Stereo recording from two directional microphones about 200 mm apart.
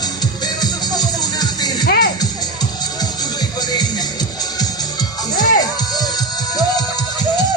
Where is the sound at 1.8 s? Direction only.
50° left (ahead or behind).